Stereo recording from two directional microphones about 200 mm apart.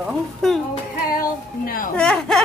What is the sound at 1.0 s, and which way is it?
Speech, 45° left (ahead or behind).